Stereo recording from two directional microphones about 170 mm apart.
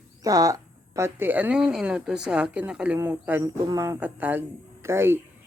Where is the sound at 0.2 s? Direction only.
20° right (ahead or behind).